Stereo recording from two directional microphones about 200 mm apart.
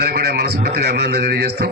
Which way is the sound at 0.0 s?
55° right (ahead or behind).